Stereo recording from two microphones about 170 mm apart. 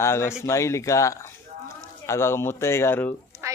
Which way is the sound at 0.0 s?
15° left (ahead or behind).